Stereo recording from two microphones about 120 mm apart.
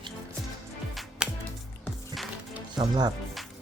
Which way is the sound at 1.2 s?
5° right (ahead or behind).